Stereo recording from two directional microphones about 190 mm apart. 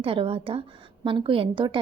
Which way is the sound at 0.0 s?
30° right (ahead or behind).